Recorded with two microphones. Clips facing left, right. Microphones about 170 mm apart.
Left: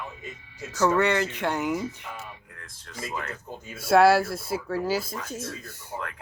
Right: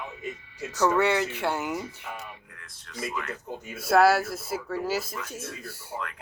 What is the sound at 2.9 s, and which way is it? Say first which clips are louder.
Speech: right 1 dB; 35° left (ahead or behind).